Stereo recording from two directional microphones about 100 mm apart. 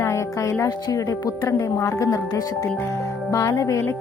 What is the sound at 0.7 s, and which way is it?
Speech, 40° left (ahead or behind).